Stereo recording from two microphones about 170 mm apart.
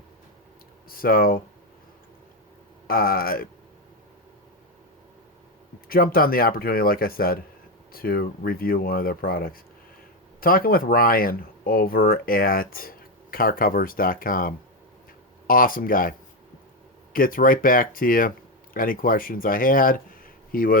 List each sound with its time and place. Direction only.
0.9 s speech: 60° left (ahead or behind)
2.8 s speech: 60° left (ahead or behind)
5.9 s speech: 60° left (ahead or behind)